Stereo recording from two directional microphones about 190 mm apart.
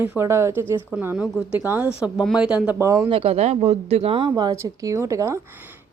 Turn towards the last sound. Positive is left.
turn(degrees=-15)  # may be behind; listen again after turning